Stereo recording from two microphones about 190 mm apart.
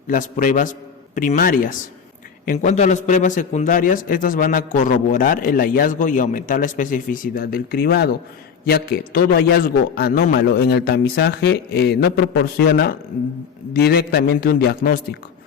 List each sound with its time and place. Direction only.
0.1 s a man's voice: 45° left (ahead or behind)